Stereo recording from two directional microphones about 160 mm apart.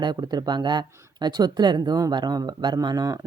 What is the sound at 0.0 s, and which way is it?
Speech, 25° right (ahead or behind).